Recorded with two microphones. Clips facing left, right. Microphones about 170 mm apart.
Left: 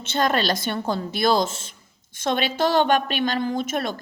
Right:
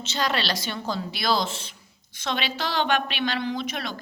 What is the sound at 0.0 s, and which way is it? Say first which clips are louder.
A woman's voice: left 5 dB; 50° left (ahead or behind).